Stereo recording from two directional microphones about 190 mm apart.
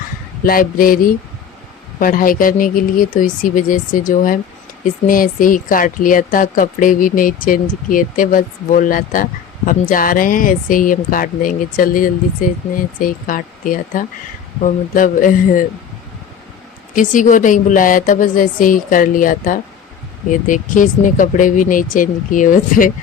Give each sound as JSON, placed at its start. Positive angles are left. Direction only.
{"t": 0.4, "sound": "speech", "side_deg": 50}
{"t": 16.9, "sound": "speech", "side_deg": 45}